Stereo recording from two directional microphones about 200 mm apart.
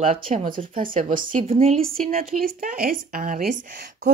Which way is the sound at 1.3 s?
30° right (ahead or behind).